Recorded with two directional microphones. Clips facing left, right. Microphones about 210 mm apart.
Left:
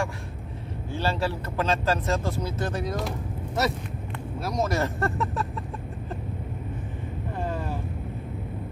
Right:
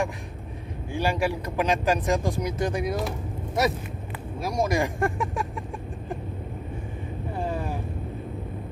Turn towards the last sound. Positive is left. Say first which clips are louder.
# right 1 dB
turn(degrees=-10)  # may be behind; listen again after turning